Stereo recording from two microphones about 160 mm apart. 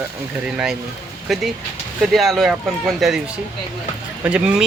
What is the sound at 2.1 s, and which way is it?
Speech, centre (ahead or behind).